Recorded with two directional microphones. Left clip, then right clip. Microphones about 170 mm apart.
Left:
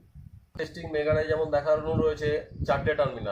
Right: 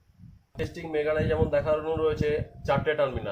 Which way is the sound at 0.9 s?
35° right (ahead or behind).